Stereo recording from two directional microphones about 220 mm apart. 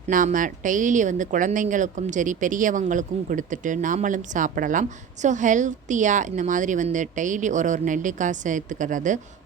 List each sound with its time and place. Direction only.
0.1 s speech: 35° right (ahead or behind)